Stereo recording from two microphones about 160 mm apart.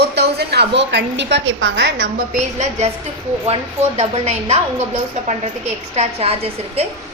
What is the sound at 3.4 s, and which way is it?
A woman's voice, 40° right (ahead or behind).